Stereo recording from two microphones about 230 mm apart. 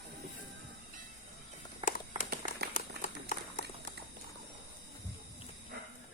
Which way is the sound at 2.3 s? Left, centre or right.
Right.